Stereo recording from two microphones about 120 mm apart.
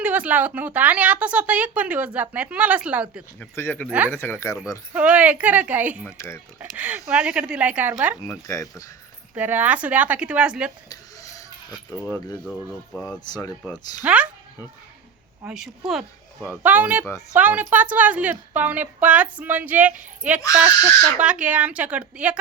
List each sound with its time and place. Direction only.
0.0 s speech: 10° right (ahead or behind)
3.5 s speech: 20° left (ahead or behind)
3.8 s speech: 10° right (ahead or behind)
4.1 s speech: 20° left (ahead or behind)
4.9 s speech: 10° right (ahead or behind)
6.1 s speech: 20° left (ahead or behind)
6.6 s speech: 15° right (ahead or behind)
8.2 s speech: 25° left (ahead or behind)
9.3 s speech: 15° right (ahead or behind)
10.8 s a sound: 30° left (ahead or behind)
13.1 s speech: 35° left (ahead or behind)
14.0 s speech: 10° right (ahead or behind)
15.4 s a woman's voice: 5° right (ahead or behind)